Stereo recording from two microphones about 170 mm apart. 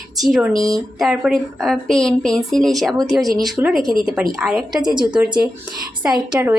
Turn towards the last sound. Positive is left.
turn(degrees=-20)  # may be behind; listen again after turning